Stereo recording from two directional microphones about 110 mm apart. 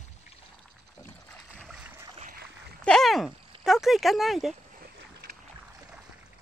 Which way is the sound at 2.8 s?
5° left (ahead or behind).